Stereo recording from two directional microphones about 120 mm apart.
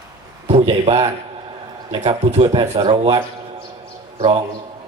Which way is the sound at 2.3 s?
60° right (ahead or behind).